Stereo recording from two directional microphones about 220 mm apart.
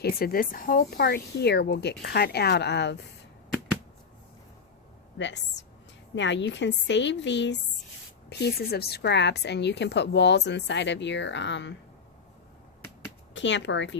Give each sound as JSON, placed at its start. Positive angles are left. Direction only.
{"t": 0.0, "sound": "a woman's voice", "side_deg": 40}
{"t": 5.1, "sound": "a woman's voice", "side_deg": 55}
{"t": 13.3, "sound": "a woman's voice", "side_deg": 55}